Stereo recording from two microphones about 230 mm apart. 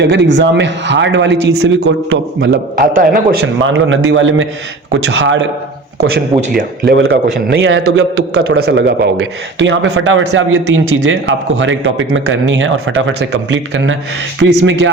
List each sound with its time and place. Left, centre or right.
0.0 s a man's voice: right
6.0 s a man's voice: right
7.5 s a man's voice: right
8.5 s a man's voice: right